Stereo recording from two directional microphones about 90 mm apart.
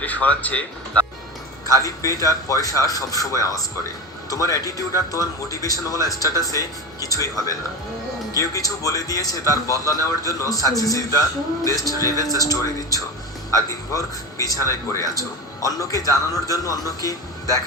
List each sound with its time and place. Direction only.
0.0 s speech: 15° left (ahead or behind)
1.6 s speech: 40° left (ahead or behind)